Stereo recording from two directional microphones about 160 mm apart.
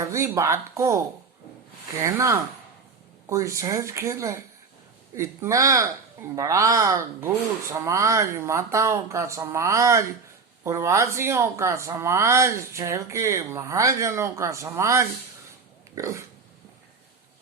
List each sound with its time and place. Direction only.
0.0 s speech: 20° right (ahead or behind)